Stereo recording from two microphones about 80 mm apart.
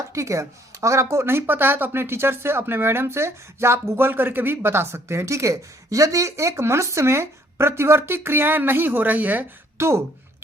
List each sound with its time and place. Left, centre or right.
0.1 s speech: right
9.7 s speech: right